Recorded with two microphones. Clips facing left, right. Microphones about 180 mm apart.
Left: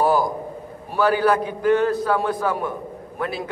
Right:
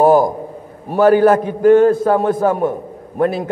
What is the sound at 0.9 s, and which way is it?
A man's voice, 45° right (ahead or behind).